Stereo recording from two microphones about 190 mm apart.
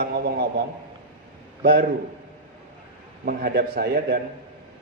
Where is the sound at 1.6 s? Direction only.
55° right (ahead or behind).